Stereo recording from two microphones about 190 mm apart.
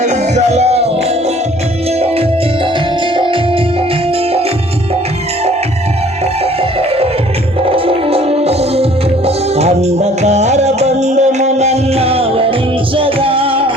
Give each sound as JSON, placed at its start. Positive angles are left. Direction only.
{"t": 0.0, "sound": "music", "side_deg": -35}
{"t": 6.6, "sound": "music", "side_deg": -30}